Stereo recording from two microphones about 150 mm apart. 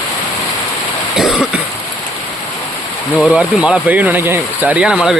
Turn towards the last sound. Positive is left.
turn(degrees=-5)  # may be behind; listen again after turning